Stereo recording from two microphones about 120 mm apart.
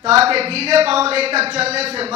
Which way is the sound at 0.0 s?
55° right (ahead or behind).